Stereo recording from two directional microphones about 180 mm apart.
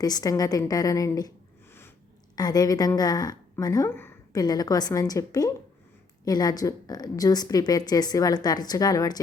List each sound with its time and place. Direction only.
0.0 s a woman's voice: 20° left (ahead or behind)
2.3 s a woman's voice: 20° left (ahead or behind)